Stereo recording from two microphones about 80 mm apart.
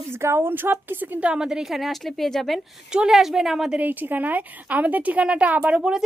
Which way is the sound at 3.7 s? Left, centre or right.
Right.